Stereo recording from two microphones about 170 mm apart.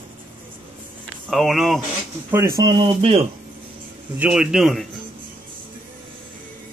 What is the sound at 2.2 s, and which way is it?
Speech, 15° right (ahead or behind).